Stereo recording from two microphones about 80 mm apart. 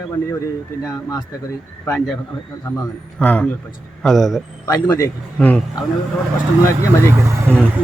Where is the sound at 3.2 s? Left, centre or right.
Centre.